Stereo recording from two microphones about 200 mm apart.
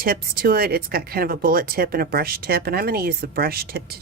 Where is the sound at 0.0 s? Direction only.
50° right (ahead or behind).